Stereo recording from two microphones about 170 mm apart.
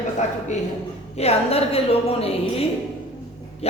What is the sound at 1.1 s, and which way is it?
A woman's voice, 35° left (ahead or behind).